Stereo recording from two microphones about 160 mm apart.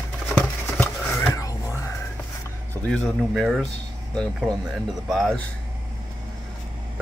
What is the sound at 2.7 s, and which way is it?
Speech, 10° left (ahead or behind).